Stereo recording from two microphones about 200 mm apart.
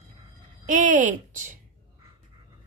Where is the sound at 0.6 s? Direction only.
40° right (ahead or behind).